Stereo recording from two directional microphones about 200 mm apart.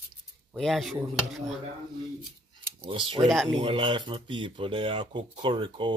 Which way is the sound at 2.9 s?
25° right (ahead or behind).